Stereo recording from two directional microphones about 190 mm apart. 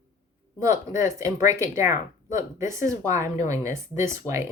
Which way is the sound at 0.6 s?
15° right (ahead or behind).